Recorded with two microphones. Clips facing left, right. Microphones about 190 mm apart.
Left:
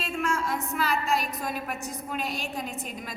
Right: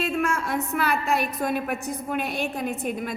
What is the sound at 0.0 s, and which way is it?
A woman's voice, 60° right (ahead or behind).